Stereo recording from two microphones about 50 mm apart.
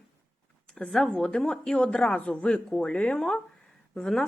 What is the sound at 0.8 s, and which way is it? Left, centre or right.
Speech, centre.